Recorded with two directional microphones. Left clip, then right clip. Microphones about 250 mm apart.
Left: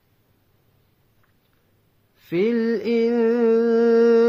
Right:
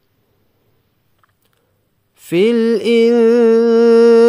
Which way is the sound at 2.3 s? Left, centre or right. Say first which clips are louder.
Right 8 dB; right.